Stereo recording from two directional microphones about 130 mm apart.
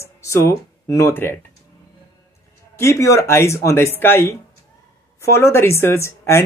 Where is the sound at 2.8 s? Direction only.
20° left (ahead or behind).